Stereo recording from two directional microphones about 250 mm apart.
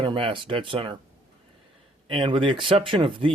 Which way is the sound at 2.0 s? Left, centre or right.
Right.